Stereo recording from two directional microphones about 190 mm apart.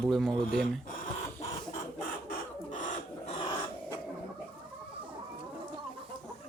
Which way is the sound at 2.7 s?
40° left (ahead or behind).